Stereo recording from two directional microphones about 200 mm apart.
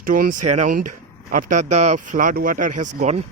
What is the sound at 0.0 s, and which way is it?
Speech, 45° right (ahead or behind).